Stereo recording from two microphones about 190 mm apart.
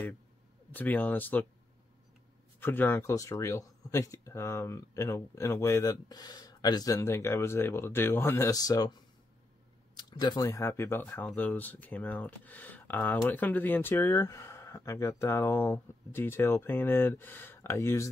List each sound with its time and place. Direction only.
0.7 s speech: 10° left (ahead or behind)
2.6 s speech: 10° left (ahead or behind)